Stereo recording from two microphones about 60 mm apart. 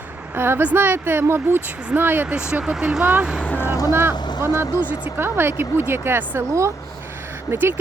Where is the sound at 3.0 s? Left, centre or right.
Right.